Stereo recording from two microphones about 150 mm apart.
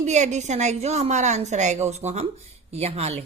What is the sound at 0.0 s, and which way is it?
A woman's voice, 50° right (ahead or behind).